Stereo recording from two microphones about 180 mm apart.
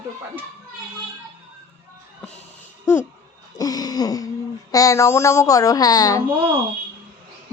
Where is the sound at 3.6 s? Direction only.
20° left (ahead or behind).